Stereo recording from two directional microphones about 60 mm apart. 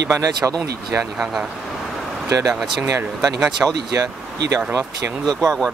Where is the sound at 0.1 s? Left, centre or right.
Right.